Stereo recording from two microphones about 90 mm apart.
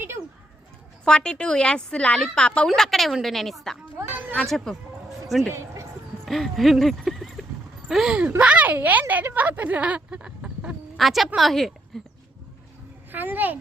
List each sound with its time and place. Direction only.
1.0 s a woman's voice: 10° left (ahead or behind)
3.9 s a sound: 20° right (ahead or behind)
4.4 s speech: centre (ahead or behind)
5.5 s a sound: 35° right (ahead or behind)
6.2 s speech: centre (ahead or behind)
10.9 s speech: centre (ahead or behind)
13.1 s a child's voice: 20° right (ahead or behind)